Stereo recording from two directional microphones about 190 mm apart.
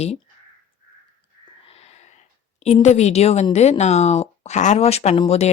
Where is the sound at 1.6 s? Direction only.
30° left (ahead or behind).